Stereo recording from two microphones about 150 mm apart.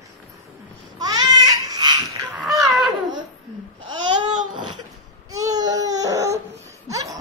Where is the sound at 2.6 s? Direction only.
Centre (ahead or behind).